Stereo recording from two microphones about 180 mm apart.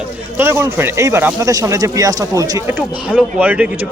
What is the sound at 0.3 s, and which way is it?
Speech, 15° right (ahead or behind).